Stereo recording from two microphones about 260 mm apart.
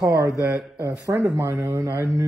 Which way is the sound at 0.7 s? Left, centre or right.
Centre.